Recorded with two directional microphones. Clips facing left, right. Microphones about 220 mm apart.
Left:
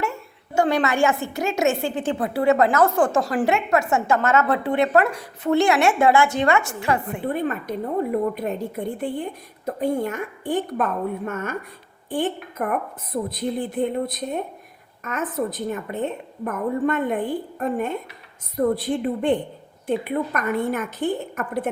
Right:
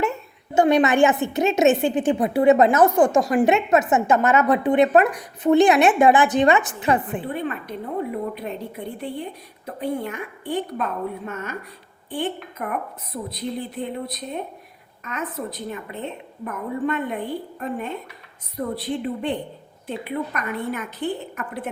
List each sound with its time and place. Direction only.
0.0 s a woman's voice: 20° right (ahead or behind)
7.3 s a woman's voice: 45° left (ahead or behind)